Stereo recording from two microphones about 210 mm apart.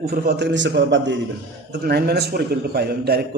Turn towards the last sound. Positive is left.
turn(degrees=-50)  # may be behind; listen again after turning